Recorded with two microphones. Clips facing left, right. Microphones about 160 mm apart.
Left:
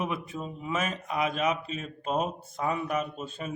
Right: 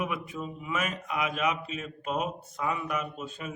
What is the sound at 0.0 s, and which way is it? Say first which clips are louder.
A man's voice: left 1 dB; 30° left (ahead or behind).